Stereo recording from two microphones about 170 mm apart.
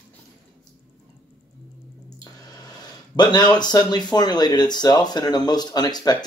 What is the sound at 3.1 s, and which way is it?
Speech, 25° left (ahead or behind).